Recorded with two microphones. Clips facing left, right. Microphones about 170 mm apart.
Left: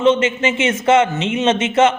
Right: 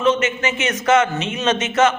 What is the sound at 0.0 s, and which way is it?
A man's voice, 25° left (ahead or behind).